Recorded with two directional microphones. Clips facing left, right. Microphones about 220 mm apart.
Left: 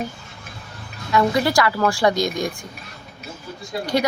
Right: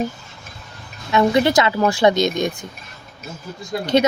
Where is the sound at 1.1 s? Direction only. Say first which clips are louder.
Right 3 dB; 20° right (ahead or behind).